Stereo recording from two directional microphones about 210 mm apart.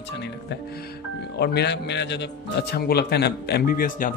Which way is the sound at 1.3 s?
50° left (ahead or behind).